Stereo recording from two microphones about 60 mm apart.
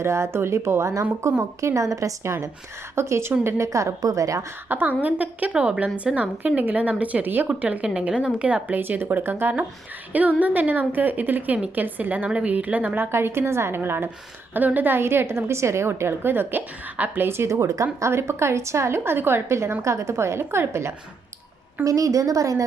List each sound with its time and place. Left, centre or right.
0.0 s a woman's voice: right
3.4 s a woman's voice: right
4.7 s a woman's voice: right
5.5 s a woman's voice: centre
13.1 s a woman's voice: right
14.5 s a woman's voice: right
17.5 s a woman's voice: right
18.0 s a woman's voice: right
21.8 s a woman's voice: right